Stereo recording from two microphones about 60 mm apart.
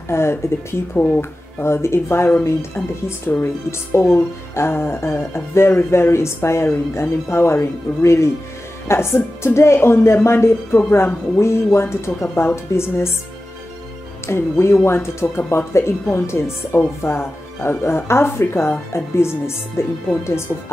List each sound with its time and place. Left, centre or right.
0.1 s speech: left
0.9 s speech: left
1.6 s speech: left
14.2 s speech: left